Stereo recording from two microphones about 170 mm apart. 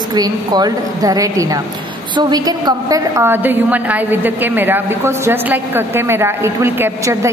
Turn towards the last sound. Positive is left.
turn(degrees=-15)  # may be behind; listen again after turning